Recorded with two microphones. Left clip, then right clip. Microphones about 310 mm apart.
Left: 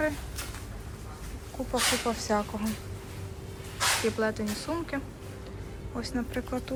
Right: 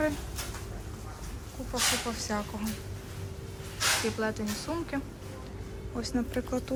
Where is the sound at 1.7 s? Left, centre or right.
Centre.